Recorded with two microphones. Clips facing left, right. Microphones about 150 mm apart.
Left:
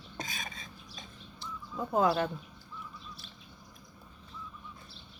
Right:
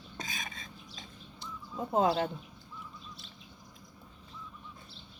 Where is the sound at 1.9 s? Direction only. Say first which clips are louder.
Even; 25° right (ahead or behind).